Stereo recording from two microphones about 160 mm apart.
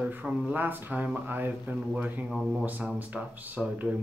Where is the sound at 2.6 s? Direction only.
10° right (ahead or behind).